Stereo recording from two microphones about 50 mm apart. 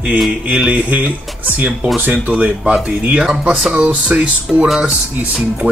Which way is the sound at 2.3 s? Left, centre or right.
Centre.